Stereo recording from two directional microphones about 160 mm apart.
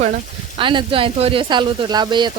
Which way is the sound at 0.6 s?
30° right (ahead or behind).